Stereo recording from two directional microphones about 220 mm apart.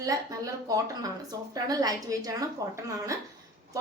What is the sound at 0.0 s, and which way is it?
A woman's voice, 15° right (ahead or behind).